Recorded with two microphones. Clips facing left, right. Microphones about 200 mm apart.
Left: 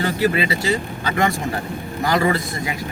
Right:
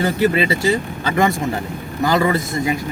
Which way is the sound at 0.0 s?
25° right (ahead or behind).